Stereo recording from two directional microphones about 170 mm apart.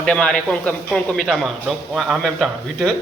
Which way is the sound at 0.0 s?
5° left (ahead or behind).